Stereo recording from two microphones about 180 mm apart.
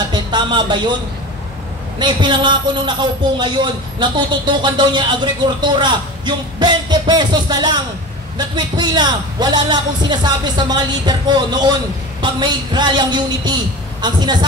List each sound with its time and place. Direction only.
0.1 s speech: 25° right (ahead or behind)
2.0 s a man's voice: 25° right (ahead or behind)